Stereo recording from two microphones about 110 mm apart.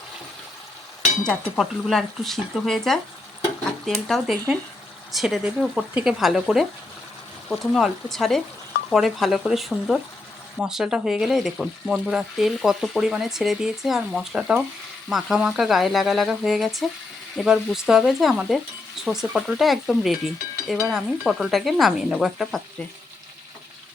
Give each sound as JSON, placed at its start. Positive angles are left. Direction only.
{"t": 1.2, "sound": "speech", "side_deg": 5}
{"t": 6.1, "sound": "speech", "side_deg": -5}